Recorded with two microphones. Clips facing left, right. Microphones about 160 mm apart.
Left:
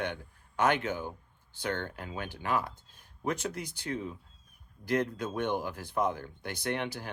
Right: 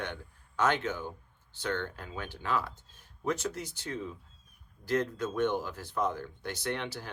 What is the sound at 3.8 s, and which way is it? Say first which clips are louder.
Speech: left 3 dB; 60° left (ahead or behind).